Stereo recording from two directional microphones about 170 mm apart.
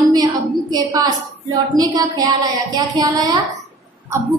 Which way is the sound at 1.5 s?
20° right (ahead or behind).